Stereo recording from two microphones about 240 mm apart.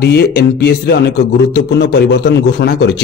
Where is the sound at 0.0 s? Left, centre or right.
Left.